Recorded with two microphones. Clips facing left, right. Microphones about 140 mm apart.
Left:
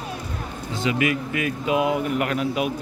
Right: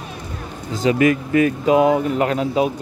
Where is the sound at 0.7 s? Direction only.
40° right (ahead or behind).